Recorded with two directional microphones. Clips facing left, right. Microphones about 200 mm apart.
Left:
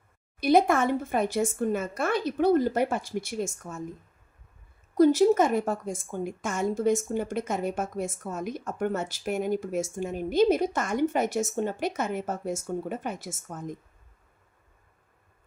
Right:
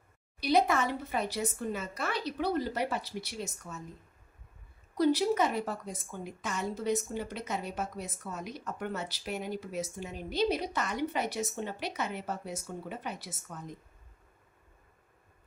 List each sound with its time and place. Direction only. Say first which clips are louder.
0.3 s a woman's voice: left 6 dB; 50° left (ahead or behind)
4.9 s a woman's voice: left 7 dB; 45° left (ahead or behind)